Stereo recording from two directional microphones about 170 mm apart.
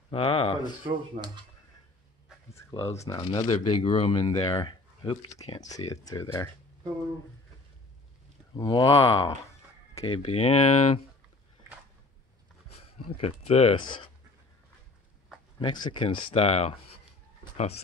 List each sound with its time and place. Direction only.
0.1 s speech: 35° left (ahead or behind)
1.1 s speech: 50° right (ahead or behind)
2.5 s speech: 15° left (ahead or behind)
8.5 s speech: 25° left (ahead or behind); by 11.0 s 40° left (ahead or behind)
13.1 s speech: 35° left (ahead or behind)
15.6 s speech: 30° left (ahead or behind)